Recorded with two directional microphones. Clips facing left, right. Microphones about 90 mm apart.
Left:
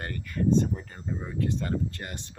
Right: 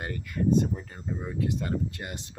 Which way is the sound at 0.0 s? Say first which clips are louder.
Even; 15° right (ahead or behind).